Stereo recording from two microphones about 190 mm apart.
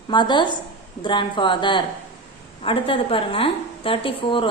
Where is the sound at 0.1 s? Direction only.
25° left (ahead or behind).